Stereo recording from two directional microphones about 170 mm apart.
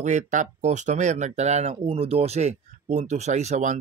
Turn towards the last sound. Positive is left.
turn(degrees=-45)  # may be behind; listen again after turning